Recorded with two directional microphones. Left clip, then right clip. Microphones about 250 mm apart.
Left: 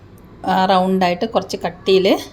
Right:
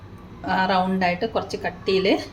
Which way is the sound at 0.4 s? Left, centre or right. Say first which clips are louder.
Left 6 dB; left.